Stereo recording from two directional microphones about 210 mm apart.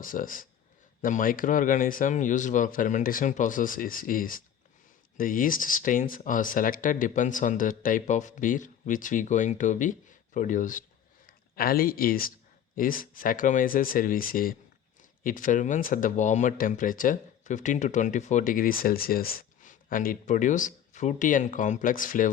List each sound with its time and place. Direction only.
0.0 s speech: 40° left (ahead or behind)